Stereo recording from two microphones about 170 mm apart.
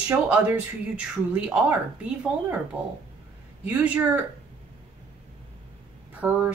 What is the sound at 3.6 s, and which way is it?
Speech, 10° right (ahead or behind).